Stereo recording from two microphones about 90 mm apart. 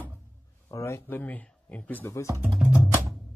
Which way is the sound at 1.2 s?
15° left (ahead or behind).